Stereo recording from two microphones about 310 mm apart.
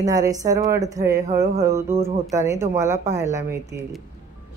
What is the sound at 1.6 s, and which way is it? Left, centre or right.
Speech, centre.